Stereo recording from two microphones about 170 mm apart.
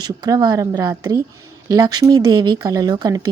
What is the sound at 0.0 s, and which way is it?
Speech, 25° right (ahead or behind).